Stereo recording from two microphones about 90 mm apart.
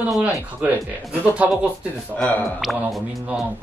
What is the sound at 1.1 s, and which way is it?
Speech, 15° right (ahead or behind).